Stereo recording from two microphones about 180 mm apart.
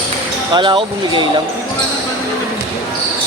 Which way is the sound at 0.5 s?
25° right (ahead or behind).